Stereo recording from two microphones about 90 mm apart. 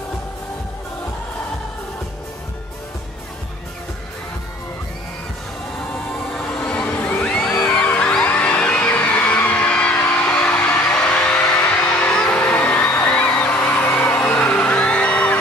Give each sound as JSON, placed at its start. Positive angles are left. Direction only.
{"t": 6.3, "sound": "music", "side_deg": 10}
{"t": 10.2, "sound": "a sound", "side_deg": 15}
{"t": 10.9, "sound": "music", "side_deg": 10}